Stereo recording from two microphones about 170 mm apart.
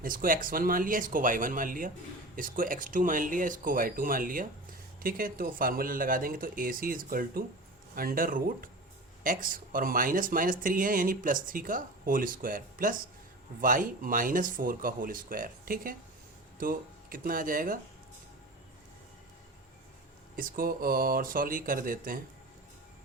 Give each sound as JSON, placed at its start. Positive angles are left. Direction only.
{"t": 0.0, "sound": "speech", "side_deg": -55}
{"t": 20.3, "sound": "speech", "side_deg": -55}